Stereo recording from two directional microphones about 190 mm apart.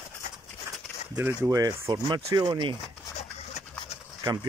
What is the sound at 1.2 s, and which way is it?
Speech, 15° right (ahead or behind).